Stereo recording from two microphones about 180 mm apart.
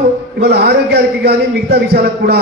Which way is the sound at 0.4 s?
60° right (ahead or behind).